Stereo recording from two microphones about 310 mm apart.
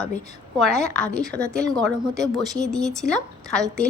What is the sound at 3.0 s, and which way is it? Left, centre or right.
Speech, centre.